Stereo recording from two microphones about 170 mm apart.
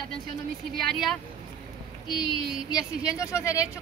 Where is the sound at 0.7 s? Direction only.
Centre (ahead or behind).